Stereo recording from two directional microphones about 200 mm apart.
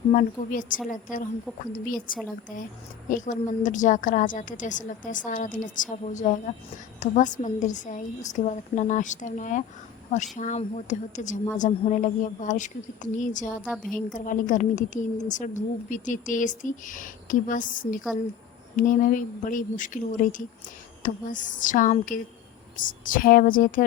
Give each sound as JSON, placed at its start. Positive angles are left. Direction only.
{"t": 0.1, "sound": "a woman's voice", "side_deg": 40}
{"t": 3.1, "sound": "a woman's voice", "side_deg": 40}